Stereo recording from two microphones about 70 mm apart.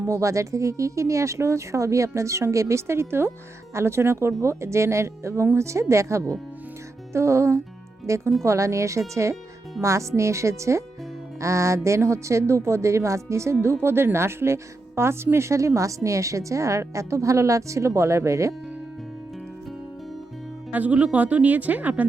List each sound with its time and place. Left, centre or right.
0.0 s speech: right
20.7 s speech: right